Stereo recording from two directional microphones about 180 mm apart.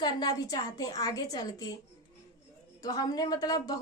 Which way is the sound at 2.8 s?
20° left (ahead or behind).